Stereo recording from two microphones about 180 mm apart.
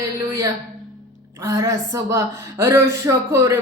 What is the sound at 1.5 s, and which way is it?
A woman's voice, 15° right (ahead or behind).